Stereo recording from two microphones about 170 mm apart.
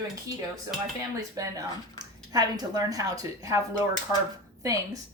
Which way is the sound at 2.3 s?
25° right (ahead or behind).